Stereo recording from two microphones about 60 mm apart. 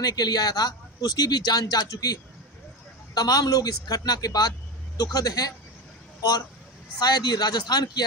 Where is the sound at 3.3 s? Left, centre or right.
Left.